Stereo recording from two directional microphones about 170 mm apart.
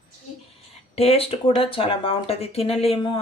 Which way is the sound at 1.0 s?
35° left (ahead or behind).